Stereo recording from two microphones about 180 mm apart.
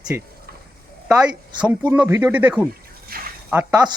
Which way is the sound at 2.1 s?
15° right (ahead or behind).